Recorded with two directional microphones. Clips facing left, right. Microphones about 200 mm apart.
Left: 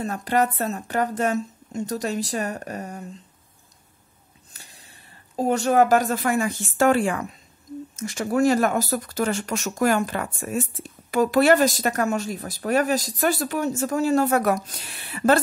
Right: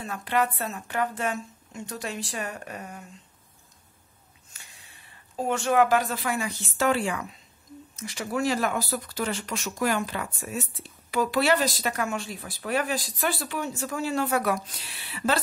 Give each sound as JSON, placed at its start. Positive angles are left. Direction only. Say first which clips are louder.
{"t": 0.0, "sound": "a woman's voice", "louder": "left 4 dB", "side_deg": 45}
{"t": 4.6, "sound": "speech", "louder": "left 4 dB", "side_deg": 40}